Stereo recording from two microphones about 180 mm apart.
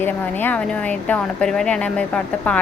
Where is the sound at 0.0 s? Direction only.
10° left (ahead or behind).